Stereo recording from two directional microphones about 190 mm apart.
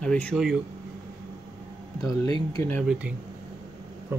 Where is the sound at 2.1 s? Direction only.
15° left (ahead or behind).